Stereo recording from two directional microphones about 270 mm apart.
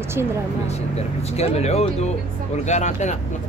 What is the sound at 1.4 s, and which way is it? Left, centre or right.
Speech, left.